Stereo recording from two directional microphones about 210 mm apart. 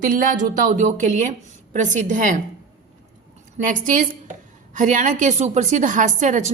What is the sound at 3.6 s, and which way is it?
A woman's voice, 40° right (ahead or behind).